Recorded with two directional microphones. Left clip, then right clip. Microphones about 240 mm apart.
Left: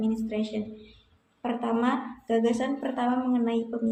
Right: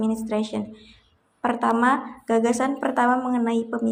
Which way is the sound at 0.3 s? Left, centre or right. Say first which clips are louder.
Right 5 dB; centre.